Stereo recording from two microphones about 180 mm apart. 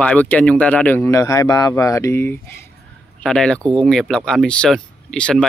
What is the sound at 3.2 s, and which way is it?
Speech, 5° left (ahead or behind).